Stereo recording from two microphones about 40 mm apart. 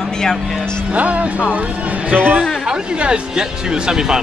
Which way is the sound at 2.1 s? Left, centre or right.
Right.